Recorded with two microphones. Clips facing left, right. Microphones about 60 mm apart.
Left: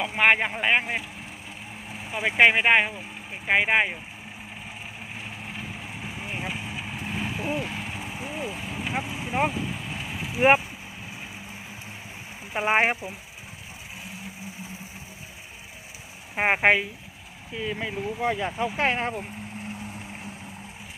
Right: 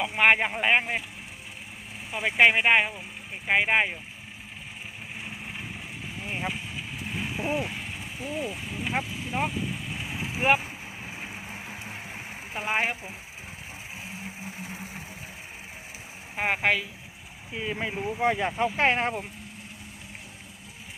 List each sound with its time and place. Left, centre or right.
0.0 s speech: centre
2.0 s speech: centre
6.1 s vehicle: centre
6.3 s speech: centre
6.7 s vehicle: centre
9.0 s speech: left
9.3 s vehicle: centre
10.6 s vehicle: right
12.5 s speech: left
16.3 s speech: left
17.5 s speech: centre